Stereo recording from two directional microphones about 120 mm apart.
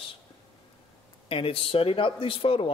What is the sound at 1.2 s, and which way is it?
A man's voice, 50° left (ahead or behind).